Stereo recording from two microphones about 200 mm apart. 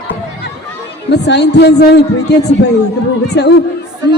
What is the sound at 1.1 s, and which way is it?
Speech, 60° left (ahead or behind).